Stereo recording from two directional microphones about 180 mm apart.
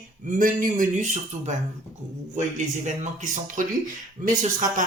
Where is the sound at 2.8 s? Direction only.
45° right (ahead or behind).